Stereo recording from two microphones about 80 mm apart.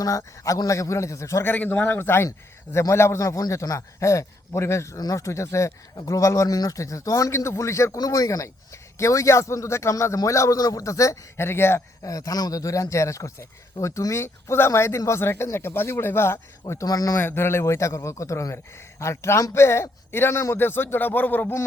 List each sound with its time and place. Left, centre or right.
0.0 s speech: left
1.5 s speech: left
7.9 s speech: left
12.0 s speech: left
16.8 s speech: left
17.2 s speech: left